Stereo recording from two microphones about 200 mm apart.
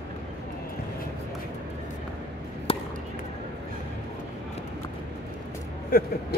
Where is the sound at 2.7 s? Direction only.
30° left (ahead or behind).